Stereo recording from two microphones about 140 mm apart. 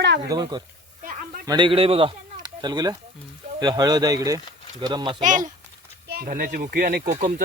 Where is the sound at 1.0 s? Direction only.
75° right (ahead or behind).